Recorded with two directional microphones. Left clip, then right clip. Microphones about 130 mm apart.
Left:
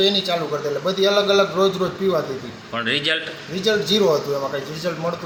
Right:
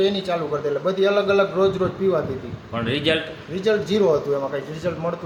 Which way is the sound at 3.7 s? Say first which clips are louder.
Left 1 dB; 40° right (ahead or behind).